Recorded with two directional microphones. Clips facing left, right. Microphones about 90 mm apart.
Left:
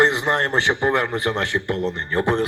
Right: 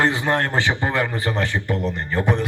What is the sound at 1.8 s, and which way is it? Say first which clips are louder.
Speech: left 1 dB; 35° left (ahead or behind).